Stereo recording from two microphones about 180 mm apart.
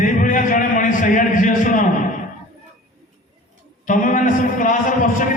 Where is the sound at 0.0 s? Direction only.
45° left (ahead or behind).